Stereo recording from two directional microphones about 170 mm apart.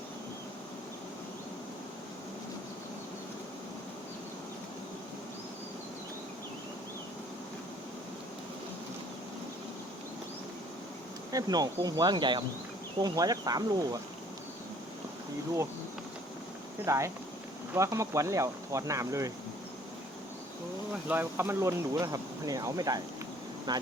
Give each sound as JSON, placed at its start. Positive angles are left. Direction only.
{"t": 11.3, "sound": "speech", "side_deg": -20}
{"t": 16.8, "sound": "speech", "side_deg": -15}
{"t": 21.1, "sound": "speech", "side_deg": -10}